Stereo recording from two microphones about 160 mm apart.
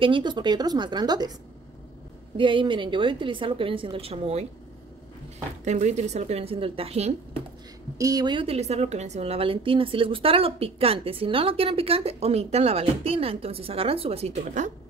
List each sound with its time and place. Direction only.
0.0 s speech: 30° right (ahead or behind)
2.3 s a woman's voice: 30° right (ahead or behind)
5.7 s a woman's voice: 45° right (ahead or behind)
8.0 s a woman's voice: 25° right (ahead or behind); by 14.7 s 45° right (ahead or behind)